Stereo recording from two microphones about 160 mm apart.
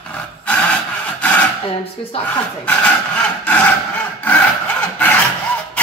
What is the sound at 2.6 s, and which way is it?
Wood, 10° left (ahead or behind).